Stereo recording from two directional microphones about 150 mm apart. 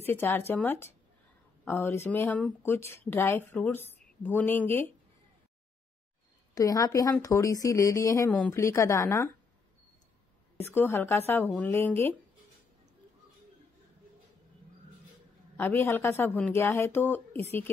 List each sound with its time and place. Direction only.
0.0 s speech: 15° left (ahead or behind)
6.5 s speech: 20° left (ahead or behind)
10.6 s speech: 15° left (ahead or behind)
15.5 s speech: 15° left (ahead or behind)